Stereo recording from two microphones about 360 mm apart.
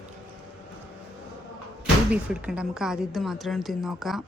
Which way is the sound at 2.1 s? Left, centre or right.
Centre.